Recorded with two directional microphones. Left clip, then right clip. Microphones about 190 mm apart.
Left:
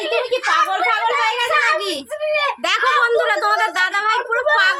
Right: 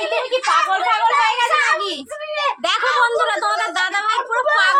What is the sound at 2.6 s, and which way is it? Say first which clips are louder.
A woman's voice: even; 20° left (ahead or behind).